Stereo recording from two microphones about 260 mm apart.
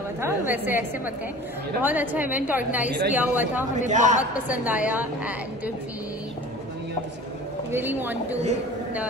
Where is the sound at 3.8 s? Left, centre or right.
Right.